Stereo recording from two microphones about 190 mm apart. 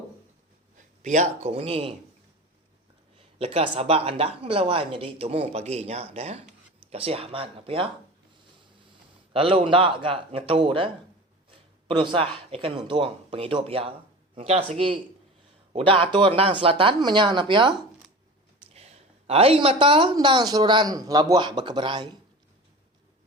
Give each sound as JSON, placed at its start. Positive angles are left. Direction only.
{"t": 1.0, "sound": "speech", "side_deg": -40}
{"t": 3.3, "sound": "speech", "side_deg": -30}
{"t": 9.3, "sound": "speech", "side_deg": -30}